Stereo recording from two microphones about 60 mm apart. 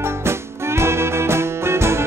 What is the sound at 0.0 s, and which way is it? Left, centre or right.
Music, right.